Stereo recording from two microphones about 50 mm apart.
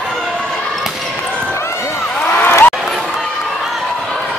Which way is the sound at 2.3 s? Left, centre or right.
Left.